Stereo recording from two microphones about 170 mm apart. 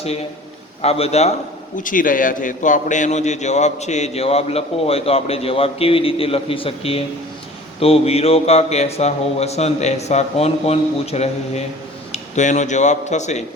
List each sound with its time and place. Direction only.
0.8 s a man's voice: 35° left (ahead or behind)
1.7 s a man's voice: 50° left (ahead or behind)